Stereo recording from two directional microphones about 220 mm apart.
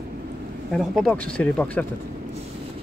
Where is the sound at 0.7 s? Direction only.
Centre (ahead or behind).